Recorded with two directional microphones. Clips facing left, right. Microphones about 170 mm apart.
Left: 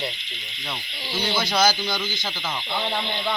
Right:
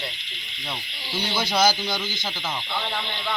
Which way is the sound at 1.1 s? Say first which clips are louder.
Left 2 dB; 5° left (ahead or behind).